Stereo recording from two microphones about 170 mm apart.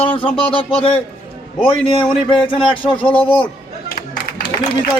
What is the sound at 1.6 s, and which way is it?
Speech, 30° left (ahead or behind).